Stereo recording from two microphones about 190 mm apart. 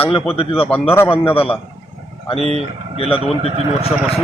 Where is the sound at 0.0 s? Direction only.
30° left (ahead or behind).